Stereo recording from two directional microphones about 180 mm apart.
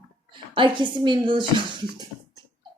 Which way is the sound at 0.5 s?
25° right (ahead or behind).